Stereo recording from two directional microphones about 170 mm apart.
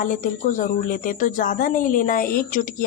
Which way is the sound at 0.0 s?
50° left (ahead or behind).